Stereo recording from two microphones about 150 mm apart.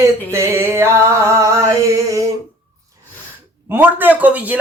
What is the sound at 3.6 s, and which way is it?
Speech, 15° right (ahead or behind).